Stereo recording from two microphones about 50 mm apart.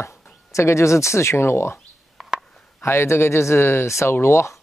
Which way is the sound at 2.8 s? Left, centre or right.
Left.